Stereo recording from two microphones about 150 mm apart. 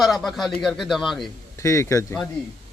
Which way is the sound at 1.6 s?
20° left (ahead or behind).